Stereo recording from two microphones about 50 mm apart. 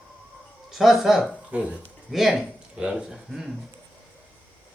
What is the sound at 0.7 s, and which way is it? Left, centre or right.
Speech, centre.